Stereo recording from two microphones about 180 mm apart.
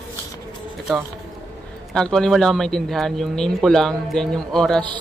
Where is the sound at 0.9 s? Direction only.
Centre (ahead or behind).